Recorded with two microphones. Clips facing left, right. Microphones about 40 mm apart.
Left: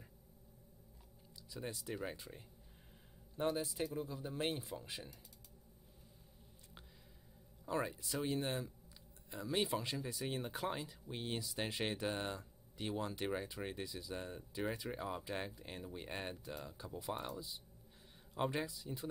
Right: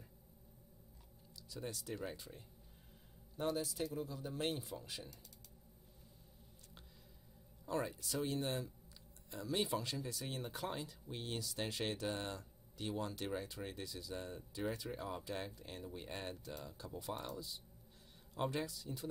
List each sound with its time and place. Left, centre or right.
1.5 s speech: centre
7.6 s speech: centre